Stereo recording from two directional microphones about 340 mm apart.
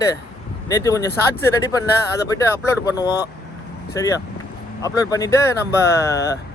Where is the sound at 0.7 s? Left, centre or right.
Centre.